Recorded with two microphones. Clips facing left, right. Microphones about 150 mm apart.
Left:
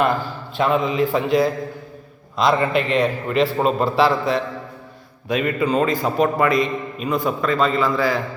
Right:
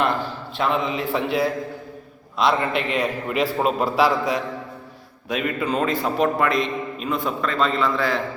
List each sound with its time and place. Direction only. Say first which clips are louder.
0.5 s a man's voice: left 4 dB; centre (ahead or behind)